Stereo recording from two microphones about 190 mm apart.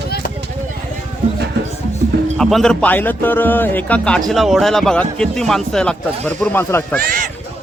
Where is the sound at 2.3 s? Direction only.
5° left (ahead or behind).